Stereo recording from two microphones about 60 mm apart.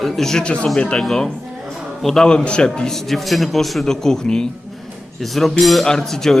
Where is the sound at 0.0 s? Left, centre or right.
Centre.